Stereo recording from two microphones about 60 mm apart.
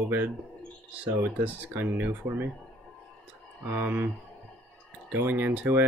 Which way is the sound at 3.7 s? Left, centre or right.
Right.